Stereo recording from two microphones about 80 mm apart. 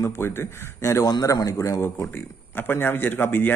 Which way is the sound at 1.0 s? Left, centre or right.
Left.